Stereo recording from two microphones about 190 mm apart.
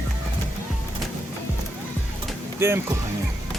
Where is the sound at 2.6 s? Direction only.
15° right (ahead or behind).